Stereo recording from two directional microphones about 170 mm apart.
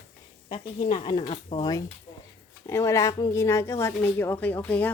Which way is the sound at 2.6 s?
15° left (ahead or behind).